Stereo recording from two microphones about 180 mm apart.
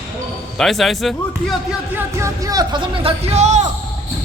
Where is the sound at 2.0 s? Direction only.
15° right (ahead or behind); by 3.7 s 40° right (ahead or behind).